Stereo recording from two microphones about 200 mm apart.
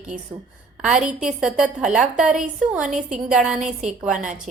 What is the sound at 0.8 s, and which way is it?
A woman's voice, 5° right (ahead or behind).